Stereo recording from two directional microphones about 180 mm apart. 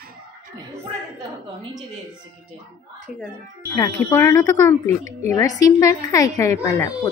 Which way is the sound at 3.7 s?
15° left (ahead or behind).